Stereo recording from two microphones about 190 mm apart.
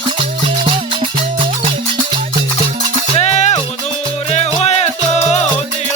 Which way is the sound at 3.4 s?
35° left (ahead or behind).